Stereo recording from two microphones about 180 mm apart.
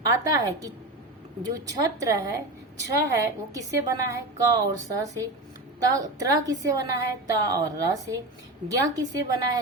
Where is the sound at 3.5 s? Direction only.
20° right (ahead or behind).